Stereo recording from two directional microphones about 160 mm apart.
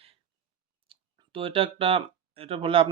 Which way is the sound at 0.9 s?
35° right (ahead or behind).